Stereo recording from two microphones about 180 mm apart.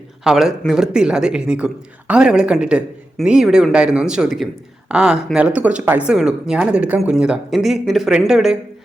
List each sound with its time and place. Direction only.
0.3 s speech: centre (ahead or behind)